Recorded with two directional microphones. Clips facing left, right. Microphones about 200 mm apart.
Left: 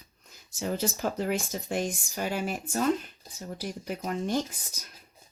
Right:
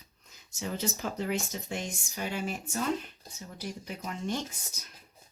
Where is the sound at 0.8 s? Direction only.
45° left (ahead or behind).